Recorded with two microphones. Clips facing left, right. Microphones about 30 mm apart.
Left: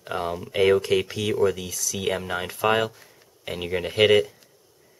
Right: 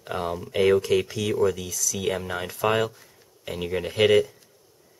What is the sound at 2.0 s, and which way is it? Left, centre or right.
Speech, centre.